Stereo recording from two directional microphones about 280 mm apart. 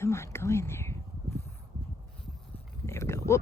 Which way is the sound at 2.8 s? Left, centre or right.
Centre.